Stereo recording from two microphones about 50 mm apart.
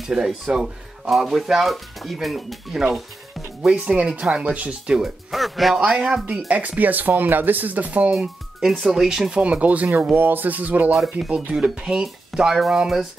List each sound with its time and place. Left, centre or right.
0.1 s speech: centre
3.6 s speech: centre
4.9 s speech: centre
6.5 s speech: right
8.1 s speech: centre
9.4 s speech: right
10.1 s speech: right
10.9 s speech: centre
11.2 s speech: centre